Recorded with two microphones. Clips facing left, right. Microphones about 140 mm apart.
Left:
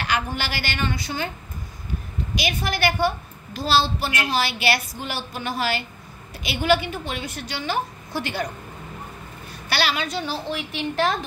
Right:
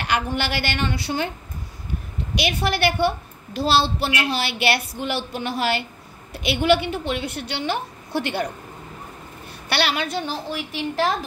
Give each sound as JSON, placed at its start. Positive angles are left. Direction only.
{"t": 0.0, "sound": "a woman's voice", "side_deg": -60}
{"t": 2.3, "sound": "a woman's voice", "side_deg": -65}
{"t": 9.7, "sound": "a woman's voice", "side_deg": -60}
{"t": 10.5, "sound": "a woman's voice", "side_deg": -35}